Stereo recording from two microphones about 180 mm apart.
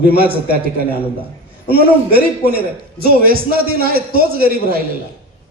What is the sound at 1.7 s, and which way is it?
A man's voice, 55° right (ahead or behind).